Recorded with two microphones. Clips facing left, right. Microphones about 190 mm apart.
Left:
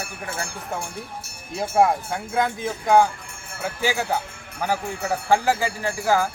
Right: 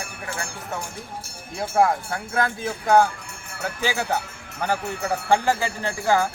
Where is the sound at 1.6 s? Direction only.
20° left (ahead or behind).